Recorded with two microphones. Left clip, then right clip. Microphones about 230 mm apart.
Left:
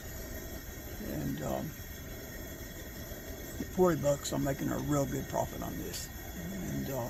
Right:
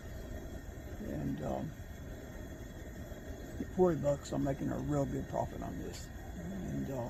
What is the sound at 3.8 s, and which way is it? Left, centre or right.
Speech, left.